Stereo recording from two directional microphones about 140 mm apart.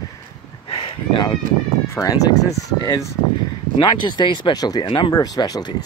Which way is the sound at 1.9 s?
25° left (ahead or behind).